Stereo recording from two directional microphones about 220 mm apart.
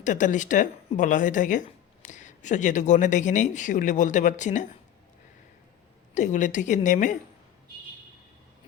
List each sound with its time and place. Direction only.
0.0 s speech: 35° left (ahead or behind)
6.1 s speech: 35° left (ahead or behind)